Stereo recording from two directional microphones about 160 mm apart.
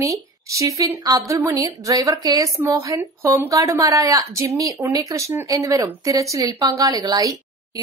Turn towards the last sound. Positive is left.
turn(degrees=-25)  # may be behind; listen again after turning